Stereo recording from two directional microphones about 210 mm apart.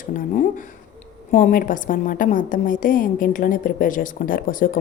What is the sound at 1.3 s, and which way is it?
A woman's voice, 40° left (ahead or behind).